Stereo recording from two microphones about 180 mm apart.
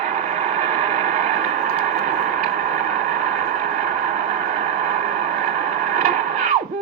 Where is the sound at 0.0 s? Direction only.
40° right (ahead or behind).